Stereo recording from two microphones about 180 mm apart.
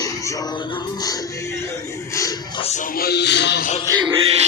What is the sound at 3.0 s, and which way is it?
Music, 65° left (ahead or behind).